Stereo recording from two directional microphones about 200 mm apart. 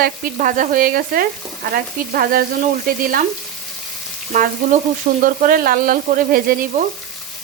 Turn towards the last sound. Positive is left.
turn(degrees=-45)  # may be behind; listen again after turning